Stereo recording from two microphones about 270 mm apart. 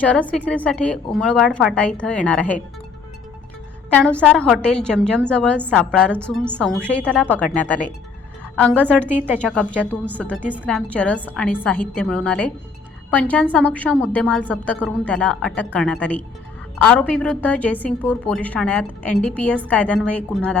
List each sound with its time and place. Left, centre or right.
0.0 s a woman's voice: centre
3.8 s a woman's voice: centre